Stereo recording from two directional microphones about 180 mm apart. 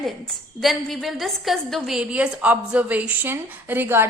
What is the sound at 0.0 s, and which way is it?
A woman's voice, centre (ahead or behind).